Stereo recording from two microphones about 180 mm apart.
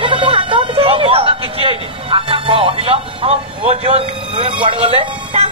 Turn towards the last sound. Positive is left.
turn(degrees=-35)  # may be behind; listen again after turning